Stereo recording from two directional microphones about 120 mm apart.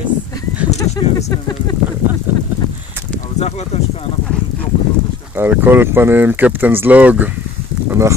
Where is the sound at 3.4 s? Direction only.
60° left (ahead or behind).